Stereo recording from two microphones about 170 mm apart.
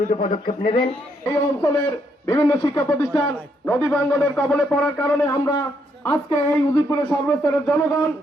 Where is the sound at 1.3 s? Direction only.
15° left (ahead or behind).